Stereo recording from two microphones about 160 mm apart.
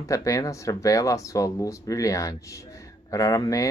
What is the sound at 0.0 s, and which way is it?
Speech, 20° left (ahead or behind).